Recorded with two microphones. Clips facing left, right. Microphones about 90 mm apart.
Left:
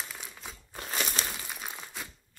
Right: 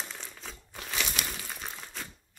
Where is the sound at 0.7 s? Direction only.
40° left (ahead or behind).